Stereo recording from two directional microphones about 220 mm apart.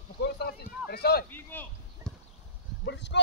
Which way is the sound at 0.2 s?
45° left (ahead or behind).